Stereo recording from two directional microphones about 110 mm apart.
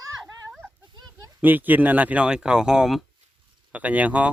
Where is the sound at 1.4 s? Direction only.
15° right (ahead or behind).